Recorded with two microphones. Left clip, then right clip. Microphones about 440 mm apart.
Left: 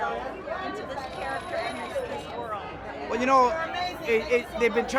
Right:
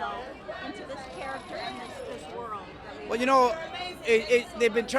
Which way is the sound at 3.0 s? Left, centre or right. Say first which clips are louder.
Left 1 dB; right.